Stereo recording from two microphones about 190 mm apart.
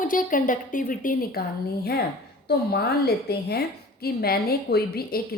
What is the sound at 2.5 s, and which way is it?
A woman's voice, 55° left (ahead or behind).